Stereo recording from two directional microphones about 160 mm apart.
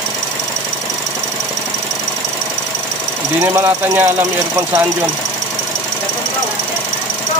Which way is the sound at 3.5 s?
20° right (ahead or behind).